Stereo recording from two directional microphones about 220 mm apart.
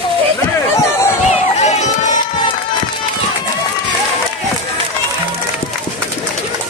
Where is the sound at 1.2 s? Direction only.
30° left (ahead or behind).